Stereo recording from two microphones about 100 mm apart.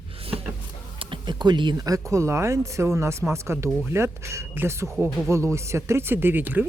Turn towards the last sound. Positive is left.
turn(degrees=-20)  # may be behind; listen again after turning